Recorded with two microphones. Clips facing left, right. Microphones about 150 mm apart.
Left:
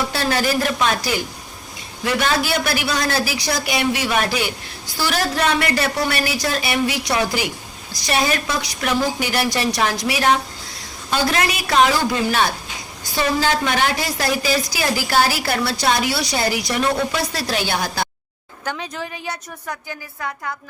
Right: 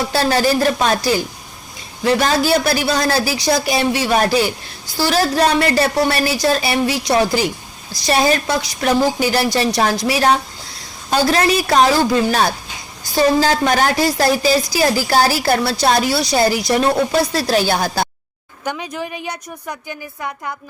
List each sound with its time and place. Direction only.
0.1 s a woman's voice: 35° right (ahead or behind)
18.6 s a woman's voice: 15° right (ahead or behind)